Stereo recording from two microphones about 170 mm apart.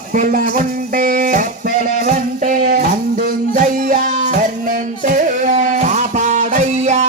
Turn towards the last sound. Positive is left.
turn(degrees=-40)  # may be behind; listen again after turning